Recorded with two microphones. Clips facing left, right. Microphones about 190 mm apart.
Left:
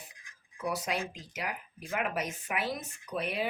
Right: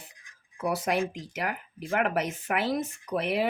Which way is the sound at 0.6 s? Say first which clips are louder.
Right 6 dB; 55° right (ahead or behind).